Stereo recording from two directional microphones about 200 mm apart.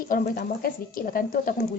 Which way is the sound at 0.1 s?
45° left (ahead or behind).